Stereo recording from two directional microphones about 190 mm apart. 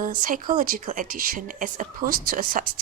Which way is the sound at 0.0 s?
45° right (ahead or behind).